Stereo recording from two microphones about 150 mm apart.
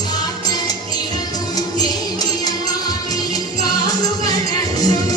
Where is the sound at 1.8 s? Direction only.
25° left (ahead or behind).